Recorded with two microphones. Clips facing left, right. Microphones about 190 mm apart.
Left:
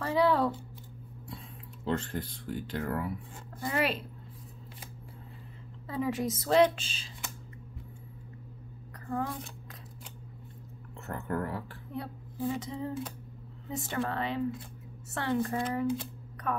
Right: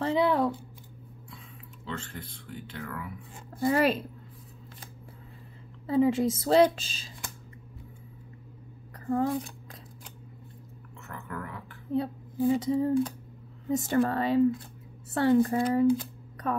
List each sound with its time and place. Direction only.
0.0 s a sound: 20° right (ahead or behind)
1.9 s speech: 40° left (ahead or behind)
3.5 s a woman's voice: 35° right (ahead or behind)
5.9 s a woman's voice: 30° right (ahead or behind)
9.0 s speech: 25° right (ahead or behind)
11.1 s speech: 35° left (ahead or behind)
11.9 s speech: 25° right (ahead or behind)
13.7 s a woman's voice: 40° right (ahead or behind)